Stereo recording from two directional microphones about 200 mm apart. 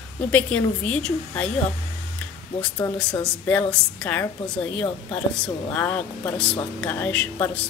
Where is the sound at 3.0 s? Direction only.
5° left (ahead or behind).